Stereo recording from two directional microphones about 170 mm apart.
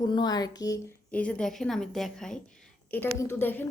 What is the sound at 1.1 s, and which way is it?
A woman's voice, 5° left (ahead or behind).